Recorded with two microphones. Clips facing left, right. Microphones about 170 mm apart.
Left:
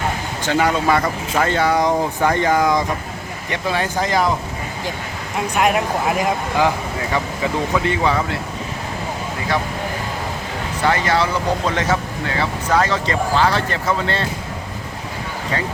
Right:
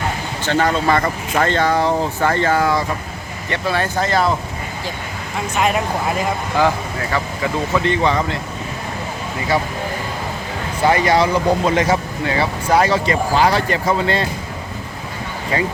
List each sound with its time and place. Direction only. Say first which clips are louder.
0.4 s speech: even; 10° left (ahead or behind)
5.5 s speech: left 1 dB; 5° left (ahead or behind)
10.8 s speech: right 3 dB; 15° right (ahead or behind)
15.5 s speech: right 4 dB; 10° right (ahead or behind)